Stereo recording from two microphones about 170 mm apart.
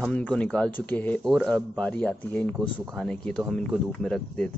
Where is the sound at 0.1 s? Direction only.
5° left (ahead or behind).